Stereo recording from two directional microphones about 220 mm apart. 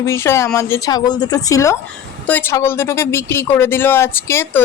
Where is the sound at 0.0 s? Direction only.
10° left (ahead or behind).